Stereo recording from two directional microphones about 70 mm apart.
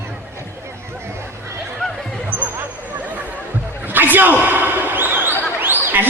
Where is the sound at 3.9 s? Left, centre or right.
Right.